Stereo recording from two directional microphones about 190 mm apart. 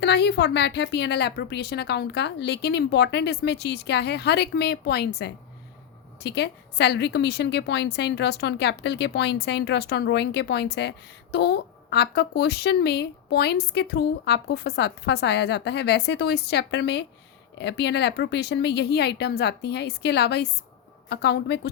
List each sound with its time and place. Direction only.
0.0 s a woman's voice: 60° left (ahead or behind)